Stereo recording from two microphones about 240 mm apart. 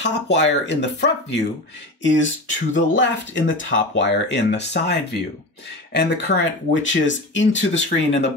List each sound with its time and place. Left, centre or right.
0.0 s speech: left